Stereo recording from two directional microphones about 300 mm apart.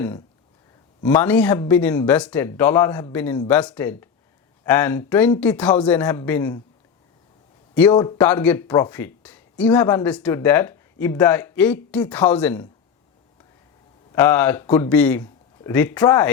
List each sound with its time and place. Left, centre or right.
1.0 s speech: centre
7.8 s speech: centre
14.1 s speech: centre